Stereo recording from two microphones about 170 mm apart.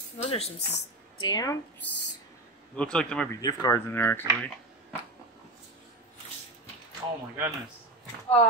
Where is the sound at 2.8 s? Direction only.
5° left (ahead or behind).